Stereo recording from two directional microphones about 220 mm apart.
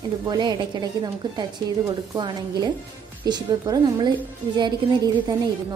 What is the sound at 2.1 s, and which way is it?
A woman's voice, 20° right (ahead or behind).